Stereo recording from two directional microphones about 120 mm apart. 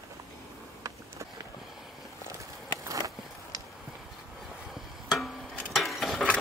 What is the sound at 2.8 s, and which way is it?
Skateboard, 30° right (ahead or behind).